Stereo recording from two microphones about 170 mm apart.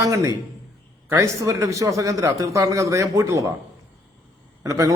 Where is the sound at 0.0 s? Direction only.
20° right (ahead or behind).